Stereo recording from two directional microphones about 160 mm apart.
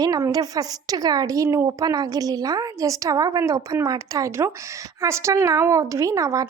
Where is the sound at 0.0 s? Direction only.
25° right (ahead or behind).